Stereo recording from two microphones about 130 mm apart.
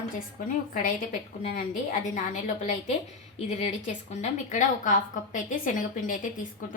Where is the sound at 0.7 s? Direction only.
90° left.